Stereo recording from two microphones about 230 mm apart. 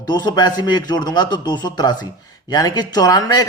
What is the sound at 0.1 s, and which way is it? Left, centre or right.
A man's voice, centre.